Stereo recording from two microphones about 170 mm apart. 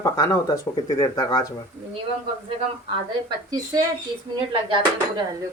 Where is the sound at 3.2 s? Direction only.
25° right (ahead or behind).